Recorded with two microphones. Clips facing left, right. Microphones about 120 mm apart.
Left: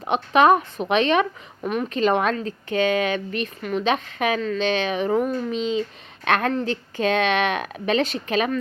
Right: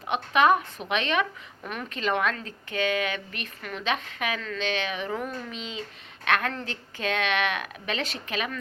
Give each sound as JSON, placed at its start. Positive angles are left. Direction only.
{"t": 0.0, "sound": "a woman's voice", "side_deg": 30}
{"t": 6.5, "sound": "speech", "side_deg": 20}
{"t": 8.3, "sound": "a woman's voice", "side_deg": 35}